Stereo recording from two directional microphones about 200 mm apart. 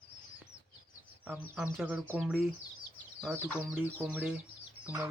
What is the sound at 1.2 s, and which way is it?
Speech, 5° right (ahead or behind).